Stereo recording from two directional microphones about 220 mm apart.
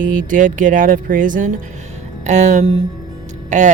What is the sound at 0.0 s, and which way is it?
Speech, 35° right (ahead or behind).